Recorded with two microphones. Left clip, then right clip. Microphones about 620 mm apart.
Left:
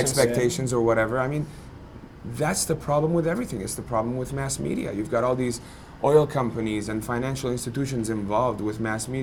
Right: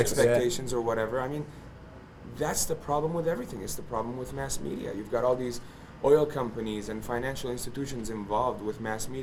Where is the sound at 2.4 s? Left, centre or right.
Left.